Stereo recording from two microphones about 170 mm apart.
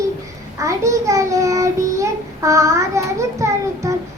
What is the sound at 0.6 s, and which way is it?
Child singing, 20° right (ahead or behind).